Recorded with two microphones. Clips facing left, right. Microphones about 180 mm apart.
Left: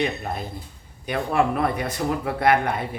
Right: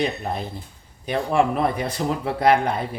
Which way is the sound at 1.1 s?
25° right (ahead or behind).